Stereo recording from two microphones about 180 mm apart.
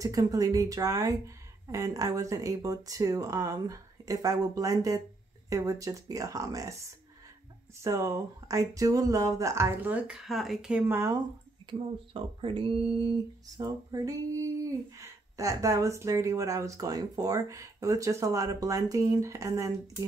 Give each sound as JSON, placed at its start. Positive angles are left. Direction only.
{"t": 0.0, "sound": "speech", "side_deg": -20}
{"t": 12.1, "sound": "speech", "side_deg": -30}